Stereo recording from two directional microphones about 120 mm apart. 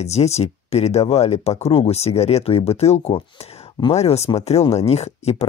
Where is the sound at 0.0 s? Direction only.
65° left (ahead or behind).